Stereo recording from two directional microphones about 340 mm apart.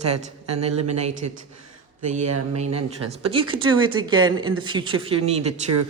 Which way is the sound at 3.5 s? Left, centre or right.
Centre.